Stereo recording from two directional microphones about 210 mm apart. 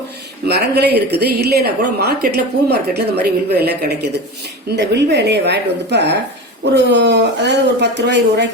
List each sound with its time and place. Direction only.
0.4 s a woman's voice: 50° right (ahead or behind)